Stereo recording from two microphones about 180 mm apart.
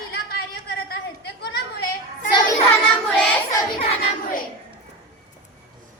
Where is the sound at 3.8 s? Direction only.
35° left (ahead or behind).